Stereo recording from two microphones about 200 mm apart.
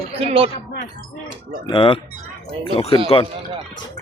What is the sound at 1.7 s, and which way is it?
Speech, 25° left (ahead or behind).